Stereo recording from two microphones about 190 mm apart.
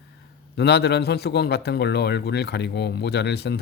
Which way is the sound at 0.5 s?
60° left (ahead or behind).